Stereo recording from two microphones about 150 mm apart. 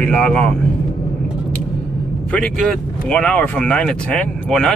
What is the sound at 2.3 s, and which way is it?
Speech, 5° left (ahead or behind).